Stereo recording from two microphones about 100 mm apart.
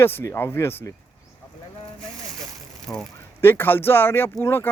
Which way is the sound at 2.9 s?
35° left (ahead or behind).